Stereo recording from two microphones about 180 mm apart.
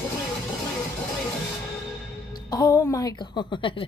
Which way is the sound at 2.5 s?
20° left (ahead or behind).